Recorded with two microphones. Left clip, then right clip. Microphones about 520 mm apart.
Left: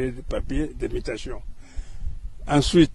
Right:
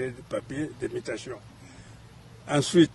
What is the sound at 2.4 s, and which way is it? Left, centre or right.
Speech, left.